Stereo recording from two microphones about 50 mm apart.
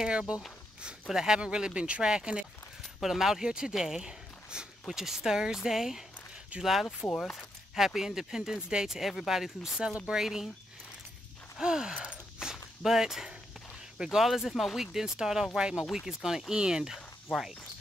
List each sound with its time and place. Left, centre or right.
0.0 s speech: centre
3.0 s speech: centre
11.6 s speech: centre
12.4 s walk: centre
13.9 s speech: centre
14.9 s speech: centre
16.9 s a sound: centre